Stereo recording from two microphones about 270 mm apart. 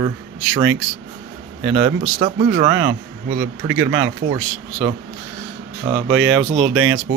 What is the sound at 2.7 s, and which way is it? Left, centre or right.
Speech, centre.